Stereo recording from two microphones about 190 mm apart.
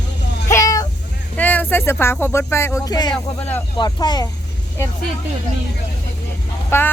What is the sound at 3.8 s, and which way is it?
Speech, 20° left (ahead or behind).